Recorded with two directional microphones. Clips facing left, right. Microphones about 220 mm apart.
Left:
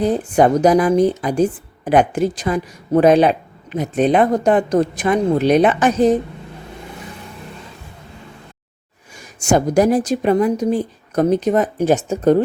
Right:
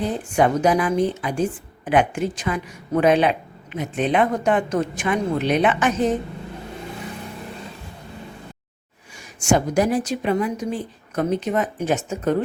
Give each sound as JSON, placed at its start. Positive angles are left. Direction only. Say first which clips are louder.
{"t": 0.1, "sound": "a woman's voice", "louder": "left 5 dB", "side_deg": 40}
{"t": 9.1, "sound": "a woman's voice", "louder": "left 3 dB", "side_deg": 40}